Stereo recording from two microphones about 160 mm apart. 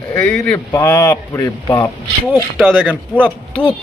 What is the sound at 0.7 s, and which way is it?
Speech, 20° left (ahead or behind).